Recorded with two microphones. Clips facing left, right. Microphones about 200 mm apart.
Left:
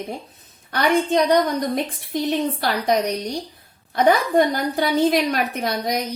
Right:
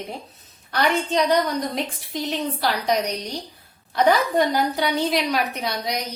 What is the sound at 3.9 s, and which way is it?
Speech, 50° left (ahead or behind).